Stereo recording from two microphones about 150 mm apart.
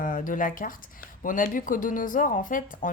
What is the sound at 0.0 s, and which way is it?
Speech, 65° left (ahead or behind).